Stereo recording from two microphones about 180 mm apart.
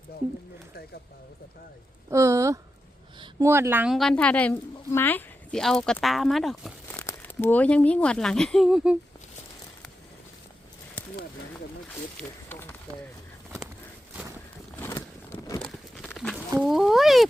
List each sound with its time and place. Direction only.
2.0 s a woman's voice: 15° right (ahead or behind)
3.9 s a woman's voice: 5° left (ahead or behind)
7.0 s speech: 15° left (ahead or behind); by 9.0 s 5° right (ahead or behind)
12.1 s speech: 10° left (ahead or behind)
14.8 s a sound: 10° left (ahead or behind)
15.6 s a sound: centre (ahead or behind)
16.6 s a woman's voice: centre (ahead or behind)